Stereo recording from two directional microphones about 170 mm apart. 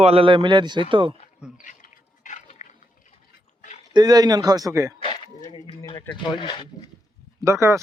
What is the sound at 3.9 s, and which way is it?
Speech, 25° right (ahead or behind).